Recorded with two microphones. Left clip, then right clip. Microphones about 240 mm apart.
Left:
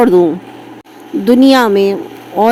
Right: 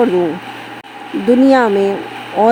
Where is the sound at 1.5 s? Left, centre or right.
Left.